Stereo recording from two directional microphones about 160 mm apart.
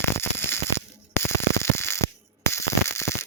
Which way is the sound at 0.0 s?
15° left (ahead or behind).